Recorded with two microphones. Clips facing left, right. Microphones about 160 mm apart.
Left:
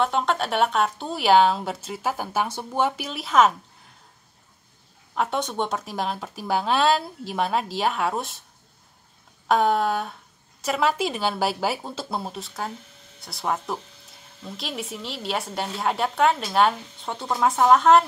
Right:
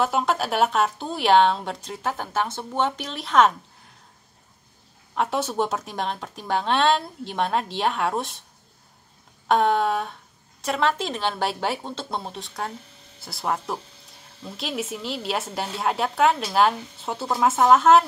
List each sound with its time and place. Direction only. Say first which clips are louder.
0.0 s a woman's voice: even; 5° right (ahead or behind)
5.1 s a woman's voice: right 1 dB; centre (ahead or behind)
9.5 s a woman's voice: even; centre (ahead or behind)